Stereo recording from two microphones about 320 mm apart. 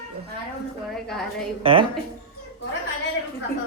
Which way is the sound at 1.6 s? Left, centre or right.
Centre.